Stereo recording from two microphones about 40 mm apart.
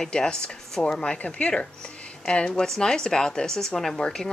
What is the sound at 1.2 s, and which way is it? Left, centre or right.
Speech, left.